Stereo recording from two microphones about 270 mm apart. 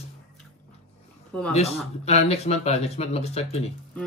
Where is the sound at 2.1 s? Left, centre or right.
Left.